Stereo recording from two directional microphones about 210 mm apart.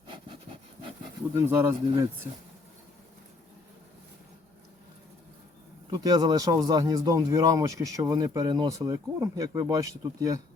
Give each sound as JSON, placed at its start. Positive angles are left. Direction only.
{"t": 1.4, "sound": "speech", "side_deg": -10}
{"t": 5.9, "sound": "speech", "side_deg": -15}